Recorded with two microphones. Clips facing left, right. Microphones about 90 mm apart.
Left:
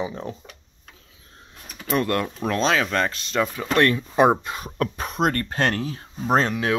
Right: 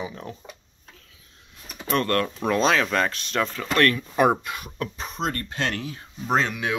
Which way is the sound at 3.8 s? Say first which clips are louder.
Left 2 dB; 20° left (ahead or behind).